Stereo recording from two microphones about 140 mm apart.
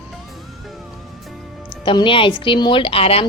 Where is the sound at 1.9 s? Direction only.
35° left (ahead or behind).